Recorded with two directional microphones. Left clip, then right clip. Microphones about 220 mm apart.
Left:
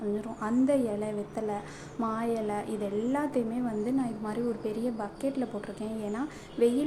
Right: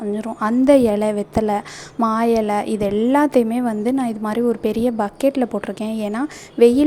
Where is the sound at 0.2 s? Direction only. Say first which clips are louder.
Right 10 dB; 40° right (ahead or behind).